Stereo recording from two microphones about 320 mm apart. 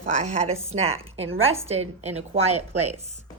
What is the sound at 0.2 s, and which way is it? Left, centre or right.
A woman's voice, right.